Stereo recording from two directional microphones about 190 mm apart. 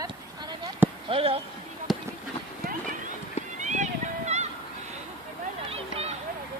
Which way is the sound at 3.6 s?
40° right (ahead or behind).